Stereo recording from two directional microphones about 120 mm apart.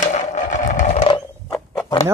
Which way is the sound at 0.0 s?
75° left (ahead or behind).